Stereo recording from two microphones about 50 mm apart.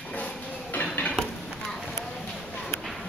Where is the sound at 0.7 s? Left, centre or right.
Left.